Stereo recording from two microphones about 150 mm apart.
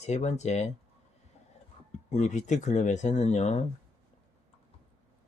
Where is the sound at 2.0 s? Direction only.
55° left (ahead or behind).